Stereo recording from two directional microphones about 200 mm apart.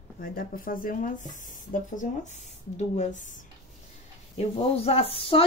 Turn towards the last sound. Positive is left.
turn(degrees=30)  # may be behind; listen again after turning